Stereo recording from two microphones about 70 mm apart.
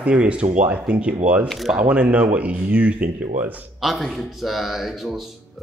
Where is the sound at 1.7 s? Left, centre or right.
Centre.